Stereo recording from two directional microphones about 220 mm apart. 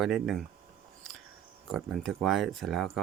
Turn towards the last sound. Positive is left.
turn(degrees=0)  # may be behind; listen again after turning